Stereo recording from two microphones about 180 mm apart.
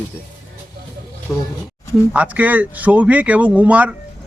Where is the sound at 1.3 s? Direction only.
15° left (ahead or behind).